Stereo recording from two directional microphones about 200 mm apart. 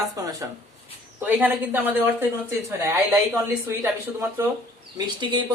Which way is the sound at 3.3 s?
10° right (ahead or behind).